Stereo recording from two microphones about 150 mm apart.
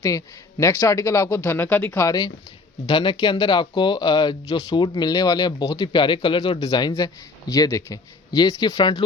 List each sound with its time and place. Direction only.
0.6 s speech: 20° left (ahead or behind)